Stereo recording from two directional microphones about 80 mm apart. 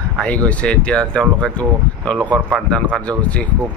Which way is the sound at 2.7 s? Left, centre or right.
Centre.